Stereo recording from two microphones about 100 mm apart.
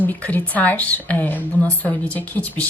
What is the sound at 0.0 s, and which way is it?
A woman's voice, 15° left (ahead or behind).